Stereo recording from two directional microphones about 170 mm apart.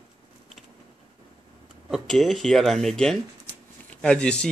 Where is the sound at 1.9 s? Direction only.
Centre (ahead or behind).